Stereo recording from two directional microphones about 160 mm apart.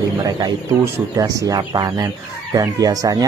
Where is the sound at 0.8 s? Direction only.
20° right (ahead or behind).